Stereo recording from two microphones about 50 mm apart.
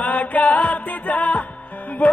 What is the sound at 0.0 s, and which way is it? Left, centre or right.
Music, left.